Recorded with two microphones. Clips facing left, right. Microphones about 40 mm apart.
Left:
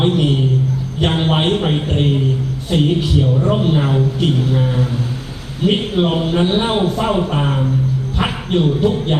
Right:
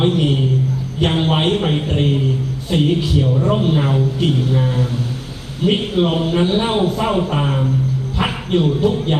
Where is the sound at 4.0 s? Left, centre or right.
Left.